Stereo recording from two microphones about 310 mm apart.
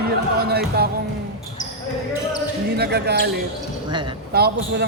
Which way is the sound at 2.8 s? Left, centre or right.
Right.